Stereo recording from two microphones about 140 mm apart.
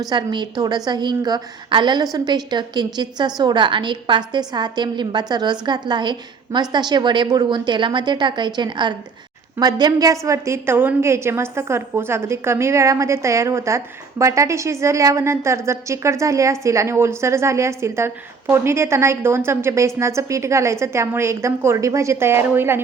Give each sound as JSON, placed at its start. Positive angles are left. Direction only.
{"t": 0.1, "sound": "a woman's voice", "side_deg": -35}